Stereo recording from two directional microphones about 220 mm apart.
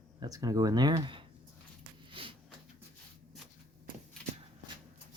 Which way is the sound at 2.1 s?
25° right (ahead or behind).